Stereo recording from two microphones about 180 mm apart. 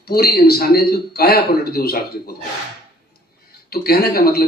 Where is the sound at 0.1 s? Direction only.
60° left (ahead or behind).